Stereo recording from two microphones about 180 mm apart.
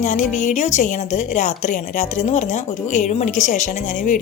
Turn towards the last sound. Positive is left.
turn(degrees=45)  # may be behind; listen again after turning